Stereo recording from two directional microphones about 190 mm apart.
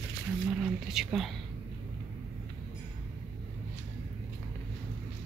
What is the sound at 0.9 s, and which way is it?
Speech, centre (ahead or behind).